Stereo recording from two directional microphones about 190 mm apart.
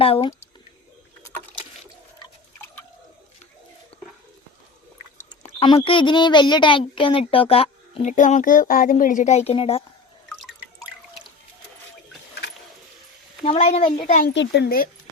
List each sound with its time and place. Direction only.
0.0 s speech: 30° left (ahead or behind)
5.5 s speech: 30° left (ahead or behind)
13.4 s a child's voice: 30° left (ahead or behind)
14.1 s a child's voice: 45° left (ahead or behind)
14.3 s speech: 60° left (ahead or behind)